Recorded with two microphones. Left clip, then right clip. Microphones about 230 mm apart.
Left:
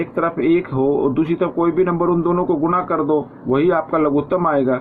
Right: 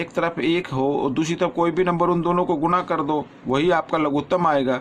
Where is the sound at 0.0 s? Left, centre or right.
Right.